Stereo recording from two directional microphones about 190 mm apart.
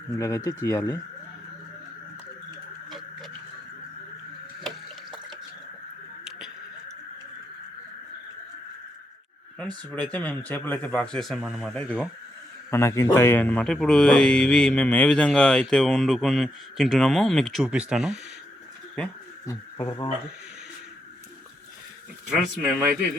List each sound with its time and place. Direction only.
0.2 s speech: 20° left (ahead or behind)
9.6 s speech: 5° left (ahead or behind)
19.5 s speech: 20° left (ahead or behind)
22.3 s speech: centre (ahead or behind)